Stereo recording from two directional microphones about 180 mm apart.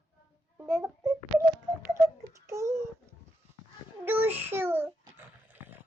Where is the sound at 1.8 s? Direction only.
15° right (ahead or behind).